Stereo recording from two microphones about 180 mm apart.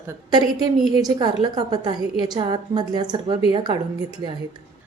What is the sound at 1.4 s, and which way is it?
A woman's voice, 25° right (ahead or behind).